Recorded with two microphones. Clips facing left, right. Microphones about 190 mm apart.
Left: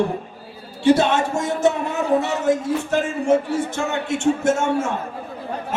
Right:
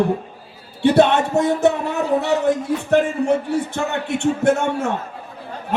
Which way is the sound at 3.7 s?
60° right (ahead or behind).